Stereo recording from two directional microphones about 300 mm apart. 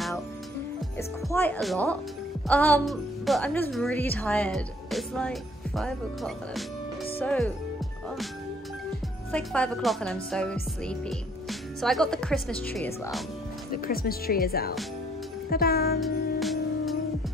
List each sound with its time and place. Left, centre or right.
0.9 s speech: centre
9.3 s speech: centre
13.7 s speech: left
15.5 s music: left
16.0 s music: centre